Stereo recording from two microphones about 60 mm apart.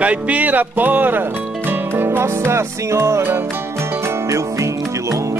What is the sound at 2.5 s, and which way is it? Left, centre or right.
Music, right.